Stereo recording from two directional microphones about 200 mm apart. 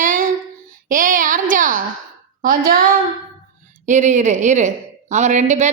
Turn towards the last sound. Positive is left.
turn(degrees=-35)  # may be behind; listen again after turning